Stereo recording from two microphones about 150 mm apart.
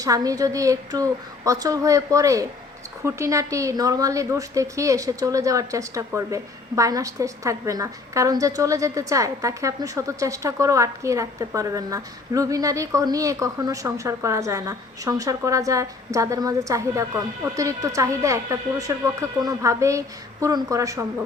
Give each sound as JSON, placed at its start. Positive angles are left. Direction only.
{"t": 0.0, "sound": "a woman's voice", "side_deg": -25}